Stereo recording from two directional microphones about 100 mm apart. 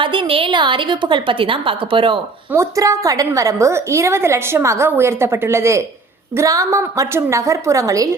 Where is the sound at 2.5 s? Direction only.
30° right (ahead or behind).